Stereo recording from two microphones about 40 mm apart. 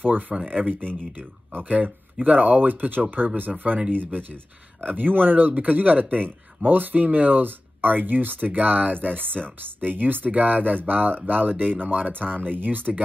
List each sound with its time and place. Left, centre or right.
0.0 s speech: right